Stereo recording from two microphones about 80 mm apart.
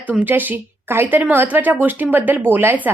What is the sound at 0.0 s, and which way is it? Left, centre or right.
A woman's voice, centre.